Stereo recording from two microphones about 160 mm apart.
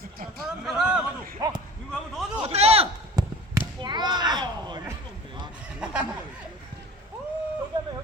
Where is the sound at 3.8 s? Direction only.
25° right (ahead or behind).